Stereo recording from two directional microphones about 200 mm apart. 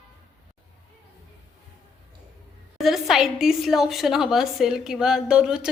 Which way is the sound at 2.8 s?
Centre (ahead or behind).